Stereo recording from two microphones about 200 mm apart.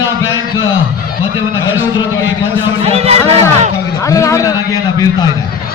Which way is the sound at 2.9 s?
30° right (ahead or behind).